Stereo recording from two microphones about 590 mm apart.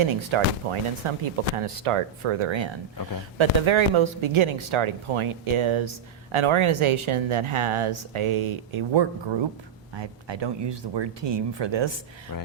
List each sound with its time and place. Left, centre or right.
0.0 s speech: right